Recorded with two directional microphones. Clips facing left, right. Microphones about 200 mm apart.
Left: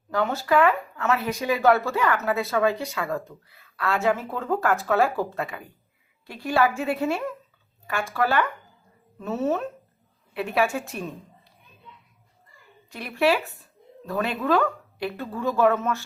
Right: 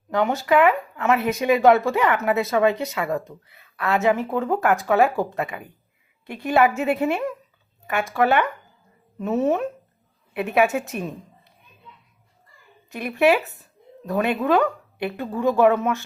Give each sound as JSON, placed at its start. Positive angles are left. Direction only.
{"t": 0.1, "sound": "a woman's voice", "side_deg": -15}
{"t": 12.9, "sound": "a woman's voice", "side_deg": -20}